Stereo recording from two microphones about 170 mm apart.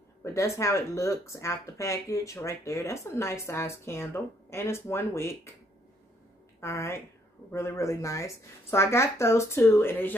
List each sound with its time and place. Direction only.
0.2 s speech: 15° left (ahead or behind)
6.6 s speech: 15° left (ahead or behind)